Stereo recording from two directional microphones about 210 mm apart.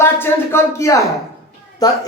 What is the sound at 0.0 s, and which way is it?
A man's voice, 10° left (ahead or behind).